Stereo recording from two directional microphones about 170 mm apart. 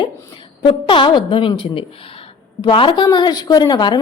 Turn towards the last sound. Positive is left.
turn(degrees=25)  # may be behind; listen again after turning